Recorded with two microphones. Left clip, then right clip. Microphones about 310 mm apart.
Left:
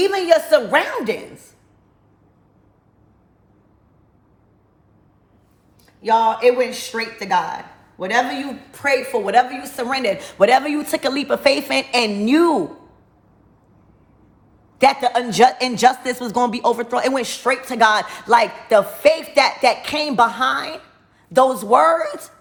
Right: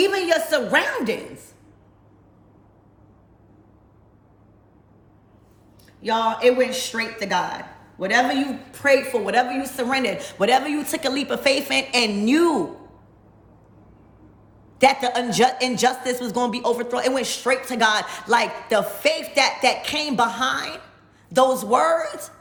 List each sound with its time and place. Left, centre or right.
0.0 s a woman's voice: centre
6.0 s a man's voice: centre
14.8 s a man's voice: centre